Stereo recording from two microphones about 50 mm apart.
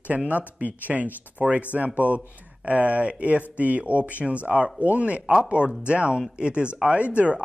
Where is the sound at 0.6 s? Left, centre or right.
Right.